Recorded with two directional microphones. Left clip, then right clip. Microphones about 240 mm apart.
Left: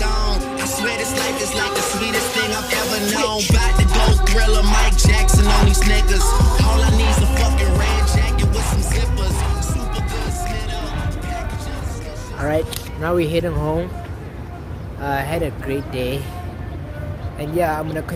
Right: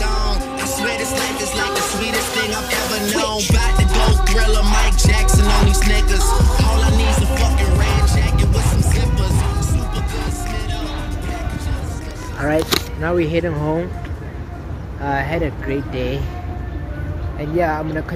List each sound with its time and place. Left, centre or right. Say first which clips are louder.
0.0 s music: even; centre
12.4 s speech: right 2 dB; centre
13.0 s speech: left 3 dB; centre
15.0 s speech: right 1 dB; centre
17.4 s speech: right 1 dB; centre